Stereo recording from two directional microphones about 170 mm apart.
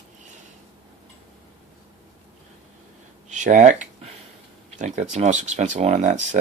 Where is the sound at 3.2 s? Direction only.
45° right (ahead or behind).